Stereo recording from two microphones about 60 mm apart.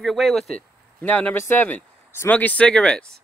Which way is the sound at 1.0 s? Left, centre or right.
Left.